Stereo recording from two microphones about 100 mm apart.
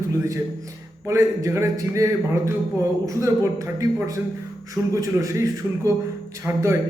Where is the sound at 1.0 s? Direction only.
30° right (ahead or behind).